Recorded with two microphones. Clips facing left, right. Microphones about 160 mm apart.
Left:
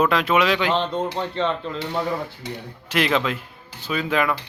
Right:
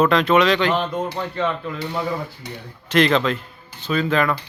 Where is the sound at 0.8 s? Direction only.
25° left (ahead or behind).